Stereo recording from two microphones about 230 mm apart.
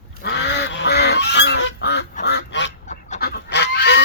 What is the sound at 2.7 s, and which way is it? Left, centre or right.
Fowl, left.